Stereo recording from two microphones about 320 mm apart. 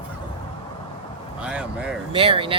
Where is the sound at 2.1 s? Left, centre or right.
Centre.